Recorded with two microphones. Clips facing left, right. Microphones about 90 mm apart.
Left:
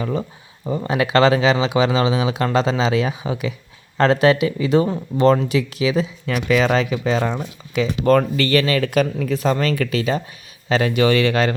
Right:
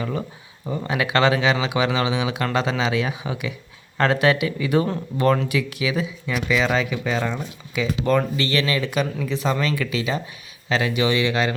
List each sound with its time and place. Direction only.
0.0 s speech: 25° left (ahead or behind)
6.2 s speech: 55° left (ahead or behind)
7.0 s speech: 30° left (ahead or behind); by 11.5 s 50° left (ahead or behind)